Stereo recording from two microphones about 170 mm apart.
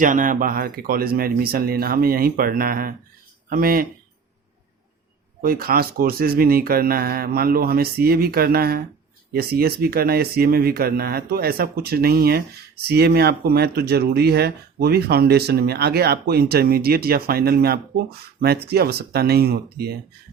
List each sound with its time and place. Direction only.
0.0 s speech: 50° right (ahead or behind)
5.4 s speech: 60° right (ahead or behind)